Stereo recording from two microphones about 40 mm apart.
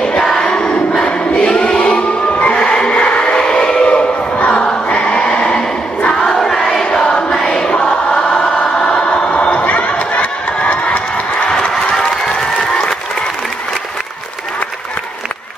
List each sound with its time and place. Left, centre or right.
0.2 s crowd: centre
0.5 s choir: left
2.9 s a sound: left
6.4 s choir: centre; by 11.5 s left
12.0 s applause: left